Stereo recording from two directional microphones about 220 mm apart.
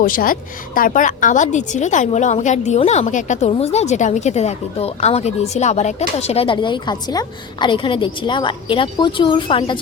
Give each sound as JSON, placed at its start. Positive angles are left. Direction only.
{"t": 0.0, "sound": "a woman's voice", "side_deg": 40}